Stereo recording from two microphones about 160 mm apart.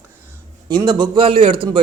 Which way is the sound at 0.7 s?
25° right (ahead or behind).